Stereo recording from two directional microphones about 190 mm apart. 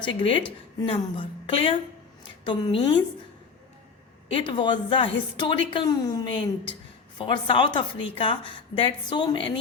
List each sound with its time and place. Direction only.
0.2 s a woman's voice: 25° left (ahead or behind)
4.3 s a woman's voice: 25° left (ahead or behind)